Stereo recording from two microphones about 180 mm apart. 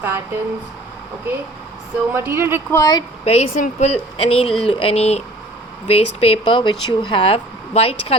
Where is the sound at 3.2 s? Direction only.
35° left (ahead or behind).